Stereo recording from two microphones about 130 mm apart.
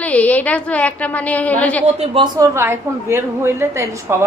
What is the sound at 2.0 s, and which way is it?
Speech, 40° right (ahead or behind).